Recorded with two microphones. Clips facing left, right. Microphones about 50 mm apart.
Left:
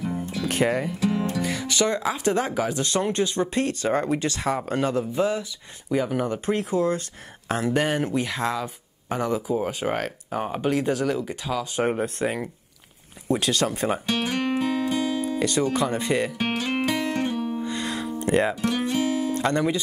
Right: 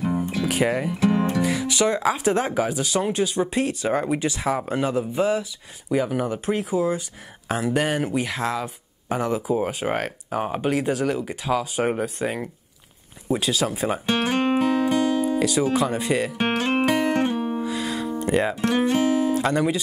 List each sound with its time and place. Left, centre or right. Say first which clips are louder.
0.0 s music: right 4 dB; right
0.5 s speech: left 1 dB; centre
0.9 s music: right 4 dB; right
1.4 s speech: right 3 dB; centre
11.8 s speech: even; centre
14.0 s music: right 4 dB; right
15.2 s speech: right 2 dB; centre
16.3 s music: right 4 dB; right
17.6 s music: right 2 dB; centre
18.2 s speech: left 1 dB; centre
18.9 s music: right 4 dB; right
19.3 s speech: right 1 dB; centre